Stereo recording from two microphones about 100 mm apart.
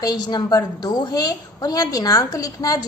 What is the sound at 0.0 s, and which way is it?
A woman's voice, 45° left (ahead or behind).